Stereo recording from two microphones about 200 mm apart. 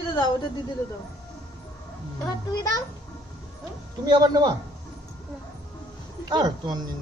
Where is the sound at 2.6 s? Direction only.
20° left (ahead or behind).